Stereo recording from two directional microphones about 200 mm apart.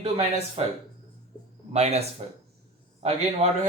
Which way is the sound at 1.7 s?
30° right (ahead or behind).